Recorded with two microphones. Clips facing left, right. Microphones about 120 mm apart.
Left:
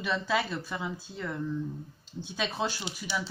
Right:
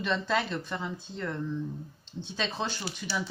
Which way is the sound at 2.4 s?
10° left (ahead or behind).